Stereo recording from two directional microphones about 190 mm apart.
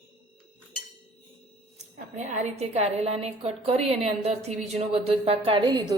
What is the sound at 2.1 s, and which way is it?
A woman's voice, 40° right (ahead or behind).